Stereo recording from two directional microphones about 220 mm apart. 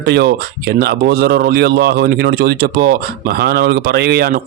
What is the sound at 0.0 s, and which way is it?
Speech, 50° right (ahead or behind).